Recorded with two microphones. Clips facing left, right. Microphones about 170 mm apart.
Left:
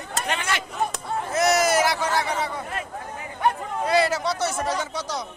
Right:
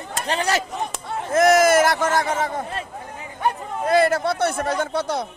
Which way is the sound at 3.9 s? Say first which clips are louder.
Right 4 dB; 55° right (ahead or behind).